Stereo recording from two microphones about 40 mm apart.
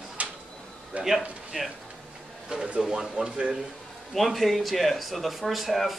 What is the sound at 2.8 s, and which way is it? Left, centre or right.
Speech, centre.